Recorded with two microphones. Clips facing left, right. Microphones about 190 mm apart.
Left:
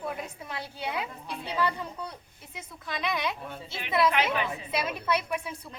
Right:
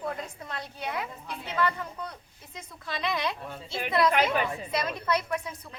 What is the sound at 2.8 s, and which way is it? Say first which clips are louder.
A woman's voice: right 1 dB; centre (ahead or behind).